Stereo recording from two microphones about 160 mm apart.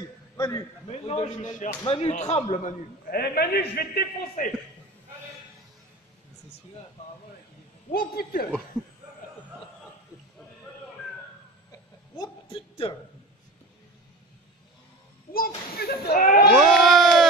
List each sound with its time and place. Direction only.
0.4 s a man's voice: 25° left (ahead or behind)
1.0 s speech: 45° left (ahead or behind)
3.1 s a man's voice: 85° left
7.9 s speech: 65° left (ahead or behind)
12.2 s a sound: 35° left (ahead or behind)
15.3 s speech: 70° left (ahead or behind)
16.5 s crowd: centre (ahead or behind)